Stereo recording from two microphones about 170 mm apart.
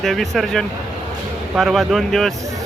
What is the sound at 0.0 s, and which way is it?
Speech, centre (ahead or behind).